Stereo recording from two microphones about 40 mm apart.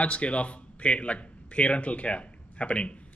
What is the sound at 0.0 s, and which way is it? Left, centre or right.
Speech, left.